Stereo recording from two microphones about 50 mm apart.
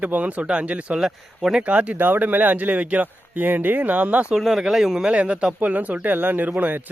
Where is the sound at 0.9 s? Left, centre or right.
Centre.